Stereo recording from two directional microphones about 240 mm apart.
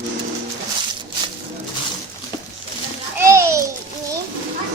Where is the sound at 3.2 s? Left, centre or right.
Centre.